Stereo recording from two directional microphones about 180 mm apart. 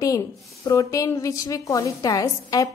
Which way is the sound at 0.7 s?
20° left (ahead or behind).